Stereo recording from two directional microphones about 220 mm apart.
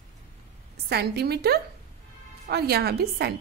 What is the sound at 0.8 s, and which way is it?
A woman's voice, 45° right (ahead or behind).